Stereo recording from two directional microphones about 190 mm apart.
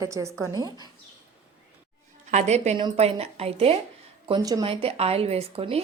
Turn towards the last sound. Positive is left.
turn(degrees=-30)  # may be behind; listen again after turning